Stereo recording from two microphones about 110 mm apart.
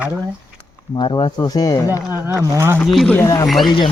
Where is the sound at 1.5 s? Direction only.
35° left (ahead or behind).